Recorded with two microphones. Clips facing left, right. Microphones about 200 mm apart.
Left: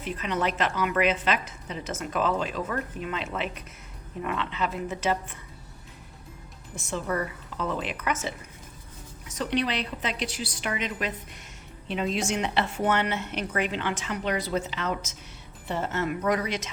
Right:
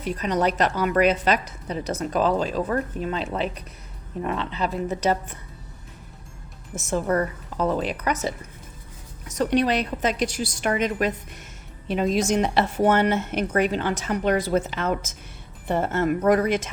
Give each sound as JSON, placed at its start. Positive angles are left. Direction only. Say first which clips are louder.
{"t": 0.0, "sound": "a woman's voice", "louder": "right 5 dB", "side_deg": -40}
{"t": 6.7, "sound": "a woman's voice", "louder": "right 7 dB", "side_deg": -45}
{"t": 9.3, "sound": "speech", "louder": "right 6 dB", "side_deg": -45}